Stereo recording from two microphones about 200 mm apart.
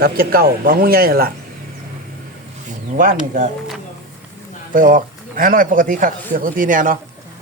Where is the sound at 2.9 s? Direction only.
45° right (ahead or behind).